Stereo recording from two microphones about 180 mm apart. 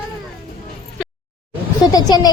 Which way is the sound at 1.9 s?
20° left (ahead or behind).